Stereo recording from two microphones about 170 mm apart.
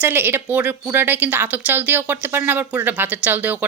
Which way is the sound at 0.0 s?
10° right (ahead or behind).